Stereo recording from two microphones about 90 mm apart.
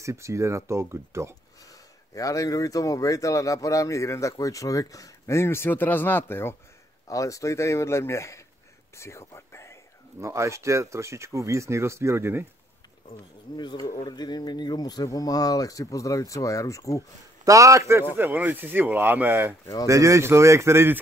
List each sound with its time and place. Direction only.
0.0 s speech: 35° right (ahead or behind)
1.7 s speech: 40° left (ahead or behind); by 6.5 s 25° left (ahead or behind)
7.1 s speech: 35° left (ahead or behind)
8.9 s whispering: 30° left (ahead or behind)
10.2 s speech: 35° right (ahead or behind)
13.6 s speech: 55° left (ahead or behind); by 17.0 s 35° left (ahead or behind)
17.5 s speech: 35° right (ahead or behind)
18.1 s speech: 20° right (ahead or behind)
19.9 s speech: 35° right (ahead or behind)